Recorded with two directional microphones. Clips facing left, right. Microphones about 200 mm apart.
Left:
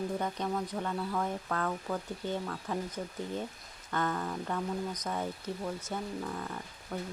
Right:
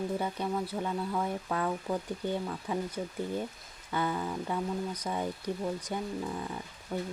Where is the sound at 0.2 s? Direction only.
10° right (ahead or behind).